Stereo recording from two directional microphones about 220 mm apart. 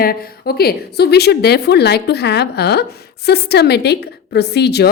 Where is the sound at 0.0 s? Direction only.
45° left (ahead or behind).